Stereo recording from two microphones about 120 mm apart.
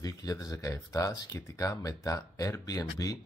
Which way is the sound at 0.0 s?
30° left (ahead or behind).